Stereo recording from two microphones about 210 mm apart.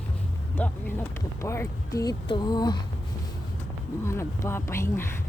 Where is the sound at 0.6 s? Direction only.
10° left (ahead or behind).